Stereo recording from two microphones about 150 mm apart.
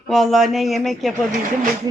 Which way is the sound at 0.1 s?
Centre (ahead or behind).